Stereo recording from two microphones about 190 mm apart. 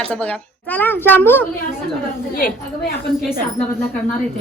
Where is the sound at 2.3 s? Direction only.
50° left (ahead or behind).